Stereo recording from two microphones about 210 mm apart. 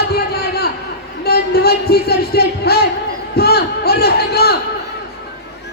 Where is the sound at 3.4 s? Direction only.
50° left (ahead or behind).